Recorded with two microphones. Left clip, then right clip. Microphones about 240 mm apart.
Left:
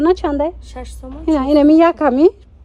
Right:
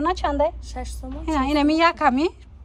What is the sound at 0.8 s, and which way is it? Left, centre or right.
Speech, left.